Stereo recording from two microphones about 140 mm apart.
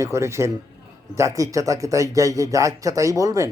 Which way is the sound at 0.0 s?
20° right (ahead or behind).